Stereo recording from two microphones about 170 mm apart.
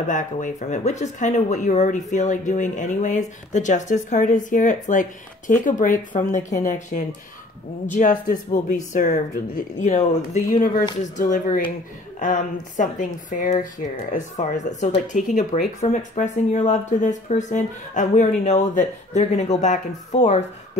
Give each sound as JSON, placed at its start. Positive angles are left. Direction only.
{"t": 0.1, "sound": "speech", "side_deg": 45}